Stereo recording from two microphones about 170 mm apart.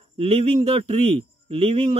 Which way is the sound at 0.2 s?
35° right (ahead or behind).